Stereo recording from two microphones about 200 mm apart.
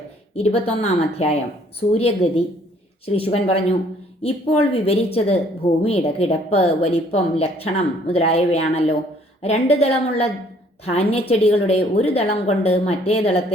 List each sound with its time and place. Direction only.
0.3 s a woman's voice: 30° left (ahead or behind)